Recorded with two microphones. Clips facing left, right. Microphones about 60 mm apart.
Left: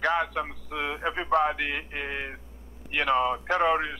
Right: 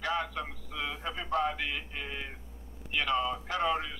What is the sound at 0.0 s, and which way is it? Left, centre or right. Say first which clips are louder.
A man's voice: left 7 dB; left.